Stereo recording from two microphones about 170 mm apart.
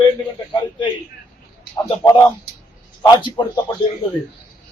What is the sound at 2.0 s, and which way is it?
A man's voice, 15° left (ahead or behind).